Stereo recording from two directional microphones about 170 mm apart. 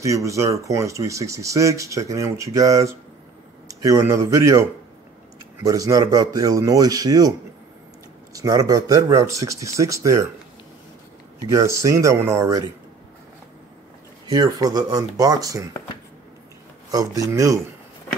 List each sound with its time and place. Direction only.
0.0 s speech: 20° right (ahead or behind)
11.4 s speech: 20° right (ahead or behind)
14.3 s speech: 20° right (ahead or behind)
16.9 s speech: 20° right (ahead or behind)